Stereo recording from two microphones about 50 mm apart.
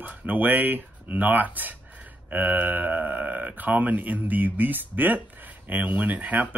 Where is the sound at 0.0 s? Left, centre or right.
Right.